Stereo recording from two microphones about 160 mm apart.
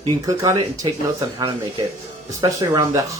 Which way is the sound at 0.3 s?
20° right (ahead or behind).